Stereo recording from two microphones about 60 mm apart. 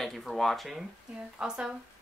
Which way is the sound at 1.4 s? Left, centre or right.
Centre.